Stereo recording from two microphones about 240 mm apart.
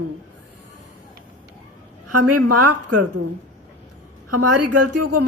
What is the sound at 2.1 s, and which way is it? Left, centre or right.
Speech, right.